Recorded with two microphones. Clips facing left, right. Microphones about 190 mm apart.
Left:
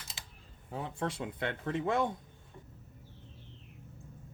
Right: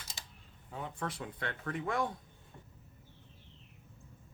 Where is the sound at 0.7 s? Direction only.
30° left (ahead or behind).